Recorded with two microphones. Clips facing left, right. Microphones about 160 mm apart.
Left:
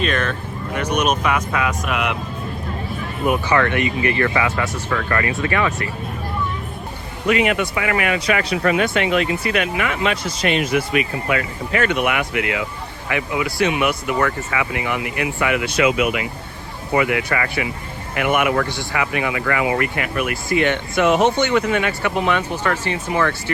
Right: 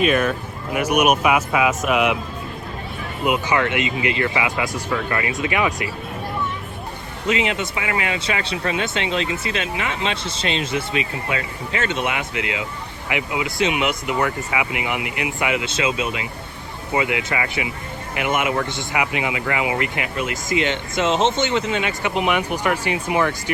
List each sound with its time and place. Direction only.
0.0 s speech: 10° right (ahead or behind)
3.2 s speech: 20° right (ahead or behind)
7.3 s speech: 25° right (ahead or behind)